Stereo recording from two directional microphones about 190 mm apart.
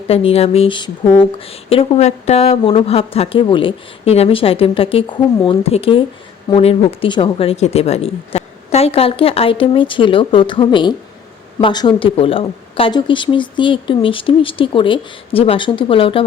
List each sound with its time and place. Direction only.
0.1 s speech: 30° left (ahead or behind)